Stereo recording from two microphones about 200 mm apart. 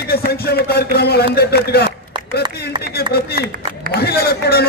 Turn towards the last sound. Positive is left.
turn(degrees=50)  # may be behind; listen again after turning